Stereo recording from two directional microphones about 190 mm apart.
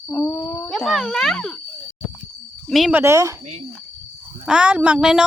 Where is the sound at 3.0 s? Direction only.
15° right (ahead or behind).